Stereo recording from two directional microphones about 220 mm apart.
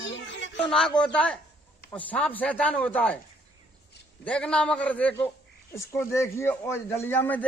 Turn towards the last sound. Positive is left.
turn(degrees=10)  # may be behind; listen again after turning